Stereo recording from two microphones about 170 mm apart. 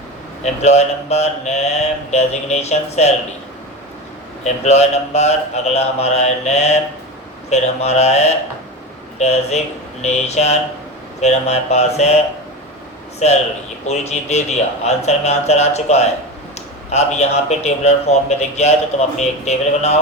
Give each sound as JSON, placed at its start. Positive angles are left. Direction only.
{"t": 0.4, "sound": "a man's voice", "side_deg": 40}
{"t": 4.6, "sound": "a man's voice", "side_deg": 40}
{"t": 13.2, "sound": "a man's voice", "side_deg": 40}